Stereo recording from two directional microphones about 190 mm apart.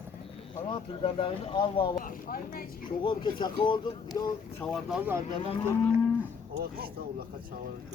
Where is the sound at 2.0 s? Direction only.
50° left (ahead or behind).